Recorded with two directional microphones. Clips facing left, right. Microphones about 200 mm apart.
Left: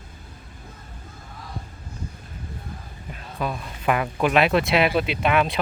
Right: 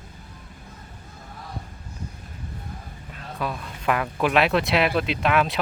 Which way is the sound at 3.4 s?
5° left (ahead or behind).